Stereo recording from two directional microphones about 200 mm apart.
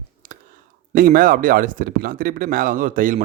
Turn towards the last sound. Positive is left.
turn(degrees=-40)  # may be behind; listen again after turning